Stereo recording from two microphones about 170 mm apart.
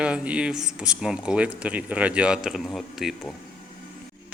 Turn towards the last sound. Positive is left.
turn(degrees=0)  # may be behind; listen again after turning